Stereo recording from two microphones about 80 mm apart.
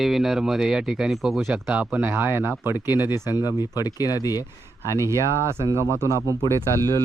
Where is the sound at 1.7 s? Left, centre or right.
Centre.